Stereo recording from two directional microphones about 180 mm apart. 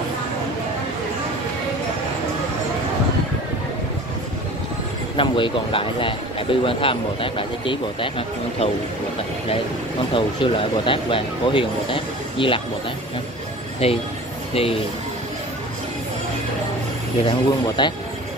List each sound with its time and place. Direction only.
5.1 s speech: 30° left (ahead or behind)
10.1 s speech: 30° left (ahead or behind)
13.8 s speech: 35° left (ahead or behind)
17.3 s speech: 25° left (ahead or behind)